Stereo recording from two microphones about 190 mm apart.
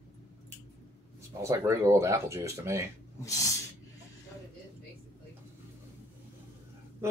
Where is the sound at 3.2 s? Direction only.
15° left (ahead or behind).